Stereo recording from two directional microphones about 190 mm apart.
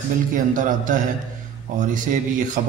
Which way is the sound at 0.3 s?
45° right (ahead or behind).